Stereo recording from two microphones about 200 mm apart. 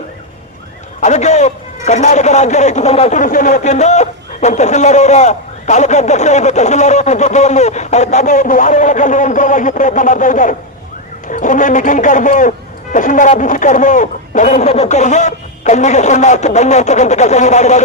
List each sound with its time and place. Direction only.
1.0 s a man's voice: 35° left (ahead or behind)